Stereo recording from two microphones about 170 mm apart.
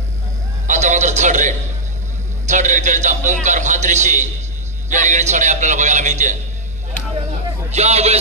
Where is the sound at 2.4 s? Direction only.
45° right (ahead or behind).